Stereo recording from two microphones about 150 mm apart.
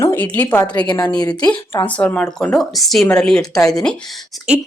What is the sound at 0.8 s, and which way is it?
A woman's voice, 30° left (ahead or behind).